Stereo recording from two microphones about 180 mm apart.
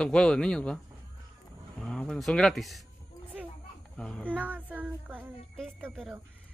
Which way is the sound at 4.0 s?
5° left (ahead or behind).